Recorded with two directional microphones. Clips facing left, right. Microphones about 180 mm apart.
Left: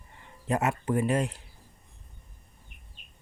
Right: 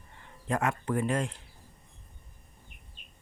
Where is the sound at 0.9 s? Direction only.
15° left (ahead or behind).